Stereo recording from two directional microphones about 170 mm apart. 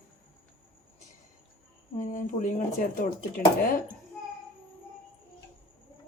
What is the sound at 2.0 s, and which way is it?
Speech, 50° left (ahead or behind).